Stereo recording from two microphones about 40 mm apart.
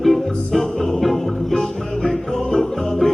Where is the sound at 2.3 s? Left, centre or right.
Centre.